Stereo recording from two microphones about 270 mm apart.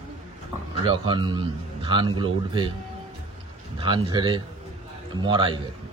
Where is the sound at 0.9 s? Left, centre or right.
Centre.